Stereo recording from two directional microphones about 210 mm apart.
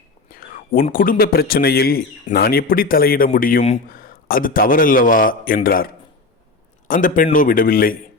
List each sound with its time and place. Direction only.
0.3 s a man's voice: 45° left (ahead or behind)